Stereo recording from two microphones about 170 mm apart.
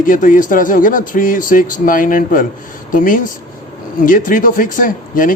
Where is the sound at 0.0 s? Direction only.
50° left (ahead or behind).